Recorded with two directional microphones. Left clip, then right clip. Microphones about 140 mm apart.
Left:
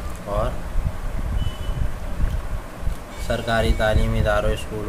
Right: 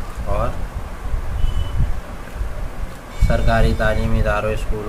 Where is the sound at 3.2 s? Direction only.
15° left (ahead or behind).